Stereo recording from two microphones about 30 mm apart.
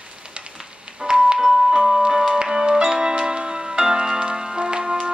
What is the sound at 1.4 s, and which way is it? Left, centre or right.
Music, centre.